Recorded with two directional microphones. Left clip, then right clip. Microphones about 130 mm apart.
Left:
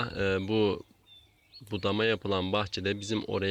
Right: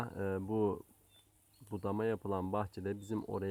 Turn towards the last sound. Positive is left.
turn(degrees=20)  # may be behind; listen again after turning